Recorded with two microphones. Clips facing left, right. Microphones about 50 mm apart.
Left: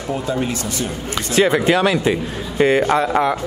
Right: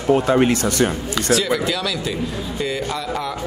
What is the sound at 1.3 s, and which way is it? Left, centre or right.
A man's voice, left.